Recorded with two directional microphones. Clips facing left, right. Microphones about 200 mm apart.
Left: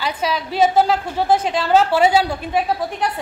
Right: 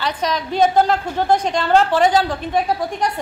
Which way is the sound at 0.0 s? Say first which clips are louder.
Even; 5° left (ahead or behind).